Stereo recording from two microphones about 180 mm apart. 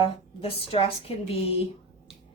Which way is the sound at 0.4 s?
35° left (ahead or behind).